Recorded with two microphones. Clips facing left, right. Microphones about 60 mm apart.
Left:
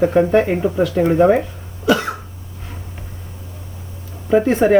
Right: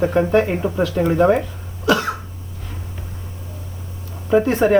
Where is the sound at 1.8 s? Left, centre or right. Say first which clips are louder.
Left 1 dB; centre.